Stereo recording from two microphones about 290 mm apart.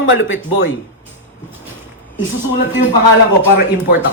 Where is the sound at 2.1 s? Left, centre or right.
Left.